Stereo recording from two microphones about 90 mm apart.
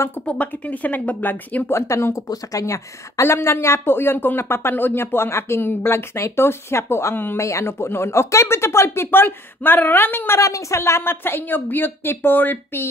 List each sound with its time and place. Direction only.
0.2 s speech: 15° left (ahead or behind)
1.8 s a woman's voice: 35° left (ahead or behind)